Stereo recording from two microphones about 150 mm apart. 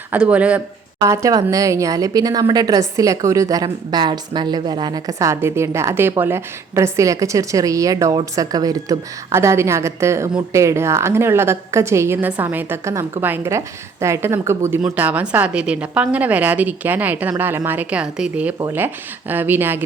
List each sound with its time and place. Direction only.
0.1 s a woman's voice: 10° right (ahead or behind)
1.0 s a woman's voice: 20° right (ahead or behind)